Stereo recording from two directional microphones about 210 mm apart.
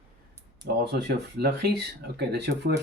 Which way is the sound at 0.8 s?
50° right (ahead or behind).